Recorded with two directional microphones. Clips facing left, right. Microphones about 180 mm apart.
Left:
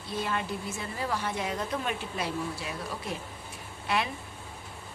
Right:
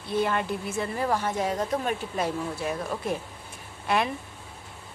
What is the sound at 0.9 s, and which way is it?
Speech, 50° right (ahead or behind).